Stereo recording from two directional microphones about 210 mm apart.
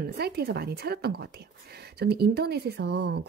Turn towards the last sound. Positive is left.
turn(degrees=-50)  # may be behind; listen again after turning